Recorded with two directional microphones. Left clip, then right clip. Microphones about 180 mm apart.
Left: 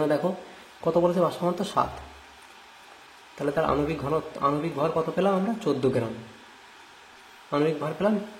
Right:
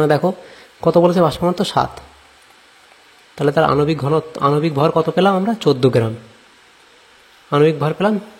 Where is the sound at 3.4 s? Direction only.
45° right (ahead or behind).